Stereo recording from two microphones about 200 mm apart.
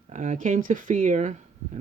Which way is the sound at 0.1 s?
40° right (ahead or behind).